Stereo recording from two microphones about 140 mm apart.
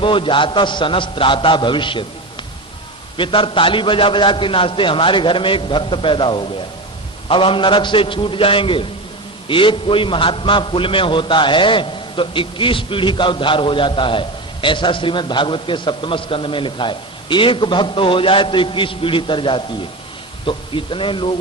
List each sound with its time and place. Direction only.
0.0 s a man's voice: 35° left (ahead or behind)
3.2 s a man's voice: 35° left (ahead or behind)